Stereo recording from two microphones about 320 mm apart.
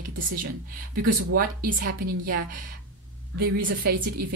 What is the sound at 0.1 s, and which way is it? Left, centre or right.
Speech, right.